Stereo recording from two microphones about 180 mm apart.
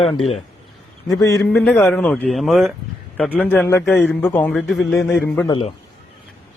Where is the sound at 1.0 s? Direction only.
20° left (ahead or behind).